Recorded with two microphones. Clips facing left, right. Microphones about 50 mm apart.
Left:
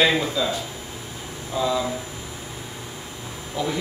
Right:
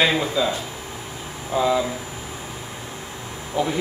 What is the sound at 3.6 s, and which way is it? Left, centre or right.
Speech, right.